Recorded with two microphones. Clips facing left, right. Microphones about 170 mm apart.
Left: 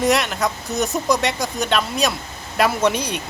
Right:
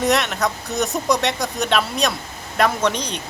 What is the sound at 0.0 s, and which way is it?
Speech, centre (ahead or behind).